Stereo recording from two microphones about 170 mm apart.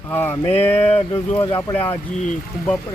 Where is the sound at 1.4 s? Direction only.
15° left (ahead or behind).